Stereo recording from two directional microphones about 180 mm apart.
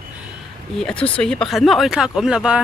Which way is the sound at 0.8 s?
5° left (ahead or behind).